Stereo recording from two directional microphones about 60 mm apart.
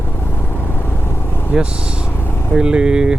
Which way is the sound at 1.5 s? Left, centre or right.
Centre.